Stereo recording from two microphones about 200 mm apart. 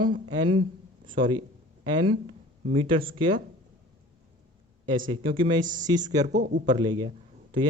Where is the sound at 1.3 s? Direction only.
20° right (ahead or behind).